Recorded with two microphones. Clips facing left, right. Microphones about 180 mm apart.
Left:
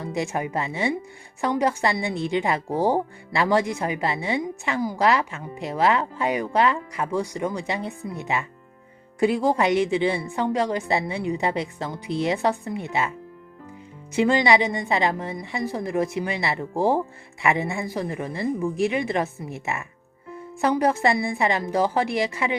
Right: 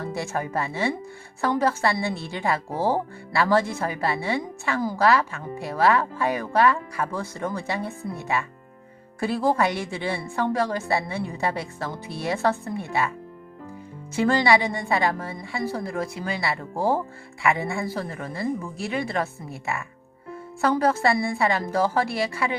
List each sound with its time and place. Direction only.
0.1 s a woman's voice: 20° left (ahead or behind)
14.2 s a woman's voice: 20° left (ahead or behind)